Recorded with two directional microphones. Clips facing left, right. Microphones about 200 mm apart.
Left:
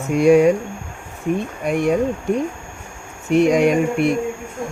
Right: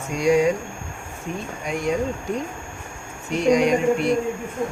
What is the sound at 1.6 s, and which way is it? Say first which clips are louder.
Speech: left 6 dB; 60° left (ahead or behind).